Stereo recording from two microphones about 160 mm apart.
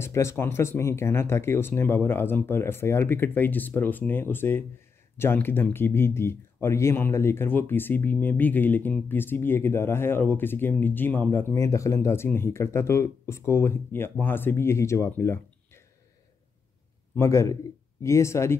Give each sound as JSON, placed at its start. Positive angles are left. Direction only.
{"t": 0.0, "sound": "speech", "side_deg": 15}
{"t": 17.2, "sound": "a man's voice", "side_deg": 20}